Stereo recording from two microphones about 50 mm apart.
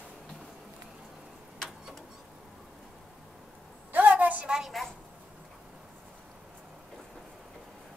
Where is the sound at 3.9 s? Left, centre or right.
Right.